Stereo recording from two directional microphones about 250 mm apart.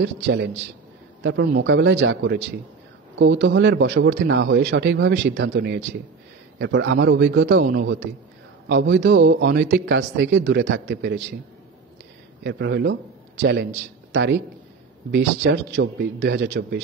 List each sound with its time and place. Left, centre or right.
0.0 s speech: right
12.4 s speech: right